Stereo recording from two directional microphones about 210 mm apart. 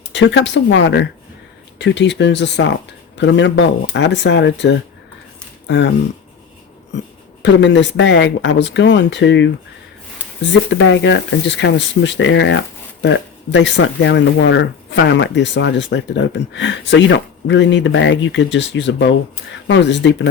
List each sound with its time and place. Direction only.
0.1 s speech: 60° left (ahead or behind)
7.4 s speech: 60° left (ahead or behind)